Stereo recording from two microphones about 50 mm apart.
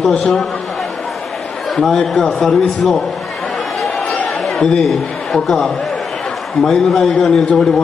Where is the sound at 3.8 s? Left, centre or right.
Centre.